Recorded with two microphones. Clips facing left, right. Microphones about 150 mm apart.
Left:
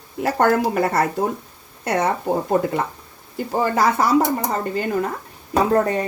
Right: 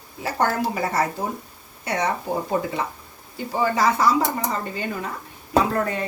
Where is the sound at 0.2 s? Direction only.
60° left (ahead or behind).